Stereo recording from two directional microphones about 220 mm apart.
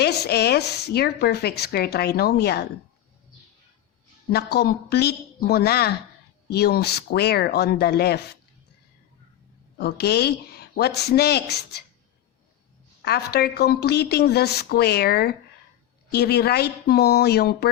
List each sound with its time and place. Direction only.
0.0 s speech: 45° left (ahead or behind)
4.3 s speech: 45° left (ahead or behind)
9.7 s speech: 45° left (ahead or behind)
13.1 s speech: 45° left (ahead or behind)